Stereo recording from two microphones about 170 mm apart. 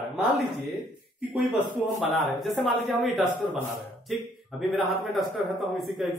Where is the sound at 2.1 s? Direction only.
Centre (ahead or behind).